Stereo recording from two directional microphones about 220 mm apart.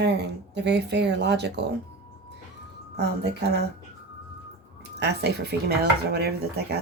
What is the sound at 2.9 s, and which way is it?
Speech, 50° right (ahead or behind).